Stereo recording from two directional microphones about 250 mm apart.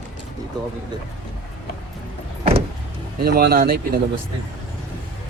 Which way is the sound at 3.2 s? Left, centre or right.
Right.